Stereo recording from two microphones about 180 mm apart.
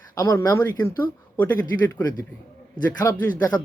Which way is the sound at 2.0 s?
20° left (ahead or behind).